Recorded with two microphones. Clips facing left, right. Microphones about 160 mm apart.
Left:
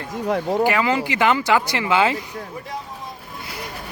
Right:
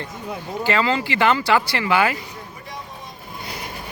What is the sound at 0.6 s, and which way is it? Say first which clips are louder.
Speech: left 2 dB; 15° left (ahead or behind).